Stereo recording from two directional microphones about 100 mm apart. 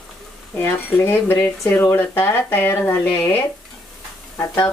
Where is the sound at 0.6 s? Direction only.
20° left (ahead or behind).